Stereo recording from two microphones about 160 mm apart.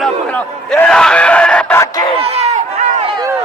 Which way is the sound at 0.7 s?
5° left (ahead or behind).